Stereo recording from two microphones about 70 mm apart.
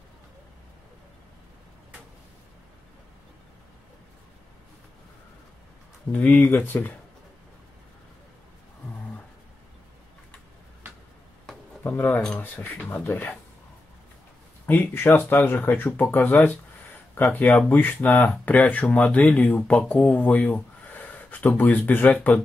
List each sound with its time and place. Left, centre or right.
6.1 s speech: left
11.8 s speech: left
14.7 s speech: left